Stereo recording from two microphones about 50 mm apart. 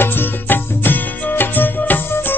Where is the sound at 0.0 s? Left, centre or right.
Left.